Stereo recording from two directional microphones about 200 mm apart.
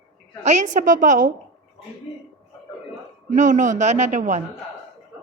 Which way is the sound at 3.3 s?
40° right (ahead or behind).